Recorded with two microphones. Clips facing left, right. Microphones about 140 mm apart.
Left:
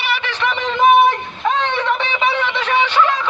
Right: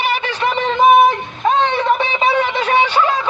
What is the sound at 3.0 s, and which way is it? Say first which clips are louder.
Music: even; 35° right (ahead or behind).